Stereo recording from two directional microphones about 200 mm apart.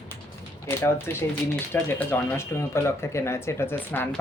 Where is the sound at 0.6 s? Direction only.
10° left (ahead or behind).